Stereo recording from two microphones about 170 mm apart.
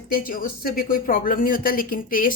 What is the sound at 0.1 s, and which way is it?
Speech, 55° left (ahead or behind).